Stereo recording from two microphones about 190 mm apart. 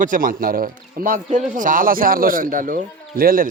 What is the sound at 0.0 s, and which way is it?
A man's voice, 45° right (ahead or behind).